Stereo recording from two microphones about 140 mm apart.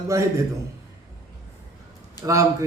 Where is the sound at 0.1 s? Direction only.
20° right (ahead or behind).